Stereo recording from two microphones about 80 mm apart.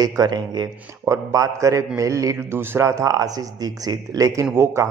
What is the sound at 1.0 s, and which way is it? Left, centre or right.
A man's voice, right.